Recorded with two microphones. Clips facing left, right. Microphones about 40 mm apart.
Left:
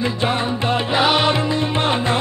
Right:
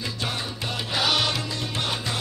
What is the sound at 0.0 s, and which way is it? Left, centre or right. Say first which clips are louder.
Music: left 10 dB; left.